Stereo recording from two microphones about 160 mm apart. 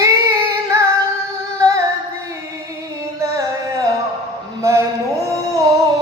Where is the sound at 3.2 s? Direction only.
20° right (ahead or behind).